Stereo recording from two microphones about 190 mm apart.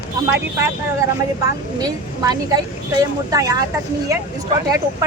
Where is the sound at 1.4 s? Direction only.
20° right (ahead or behind).